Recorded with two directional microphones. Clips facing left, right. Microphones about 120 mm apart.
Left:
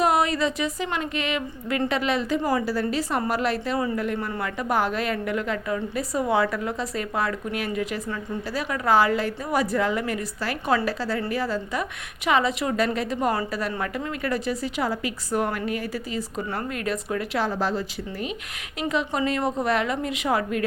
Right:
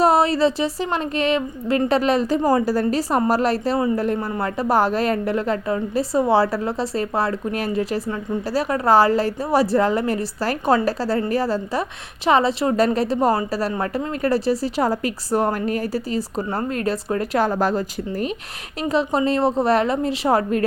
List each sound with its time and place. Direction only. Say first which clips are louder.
0.0 s a woman's voice: right 5 dB; 35° right (ahead or behind)